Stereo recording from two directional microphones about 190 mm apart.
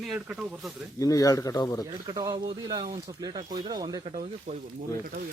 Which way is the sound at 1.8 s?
20° right (ahead or behind).